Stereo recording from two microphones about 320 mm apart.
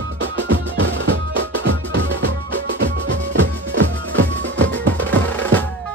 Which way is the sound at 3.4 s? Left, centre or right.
Right.